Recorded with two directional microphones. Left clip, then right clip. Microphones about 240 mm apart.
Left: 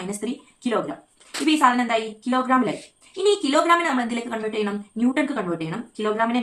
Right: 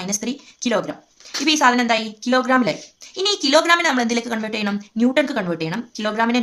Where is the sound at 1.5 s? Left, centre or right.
Right.